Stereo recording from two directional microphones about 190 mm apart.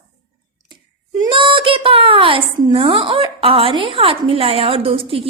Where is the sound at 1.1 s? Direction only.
25° right (ahead or behind).